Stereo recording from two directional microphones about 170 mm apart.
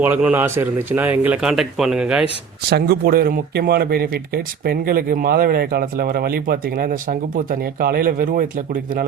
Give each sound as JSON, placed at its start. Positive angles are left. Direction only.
{"t": 0.0, "sound": "a man's voice", "side_deg": -10}
{"t": 2.6, "sound": "speech", "side_deg": -70}